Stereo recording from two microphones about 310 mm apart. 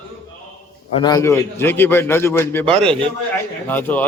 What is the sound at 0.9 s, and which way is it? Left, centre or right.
A man's voice, centre.